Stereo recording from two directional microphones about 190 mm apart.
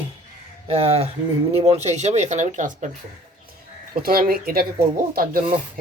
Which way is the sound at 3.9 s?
50° right (ahead or behind).